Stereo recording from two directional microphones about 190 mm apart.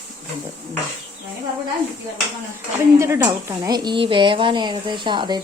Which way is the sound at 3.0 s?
15° right (ahead or behind).